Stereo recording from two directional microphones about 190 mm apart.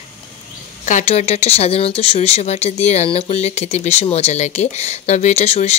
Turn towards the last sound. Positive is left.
turn(degrees=35)  # may be behind; listen again after turning